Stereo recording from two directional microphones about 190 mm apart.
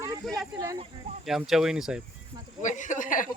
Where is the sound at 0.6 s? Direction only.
20° right (ahead or behind).